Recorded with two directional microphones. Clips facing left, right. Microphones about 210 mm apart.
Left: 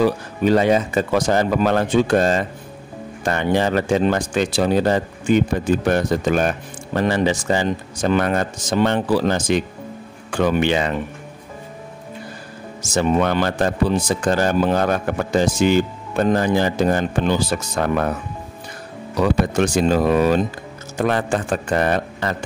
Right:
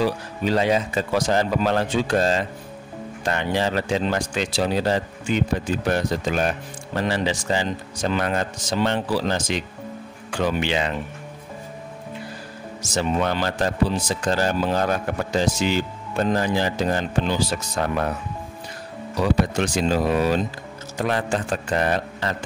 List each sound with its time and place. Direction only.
0.0 s speech: 50° left (ahead or behind)
12.9 s speech: 55° left (ahead or behind)
19.1 s speech: 55° left (ahead or behind)